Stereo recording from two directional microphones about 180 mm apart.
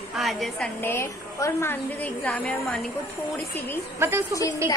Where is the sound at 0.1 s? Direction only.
Centre (ahead or behind).